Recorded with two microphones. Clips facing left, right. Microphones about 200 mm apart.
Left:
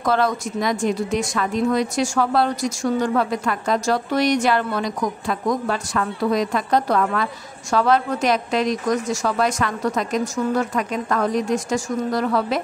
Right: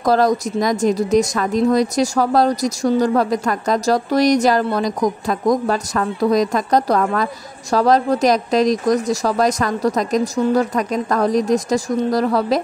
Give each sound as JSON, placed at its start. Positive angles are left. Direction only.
{"t": 0.0, "sound": "speech", "side_deg": -40}